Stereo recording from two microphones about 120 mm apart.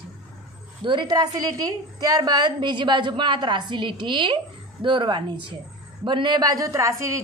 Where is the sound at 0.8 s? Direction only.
35° right (ahead or behind).